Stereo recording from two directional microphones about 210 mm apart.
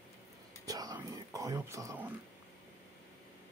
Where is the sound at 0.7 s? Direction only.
15° right (ahead or behind).